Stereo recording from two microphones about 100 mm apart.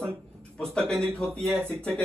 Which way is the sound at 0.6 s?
5° left (ahead or behind).